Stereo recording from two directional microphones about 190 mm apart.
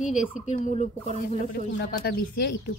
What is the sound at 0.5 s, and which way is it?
Speech, 35° left (ahead or behind).